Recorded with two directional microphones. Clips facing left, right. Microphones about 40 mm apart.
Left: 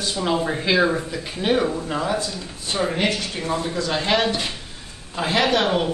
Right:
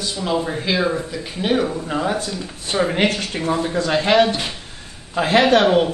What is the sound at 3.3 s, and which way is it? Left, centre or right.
Speech, right.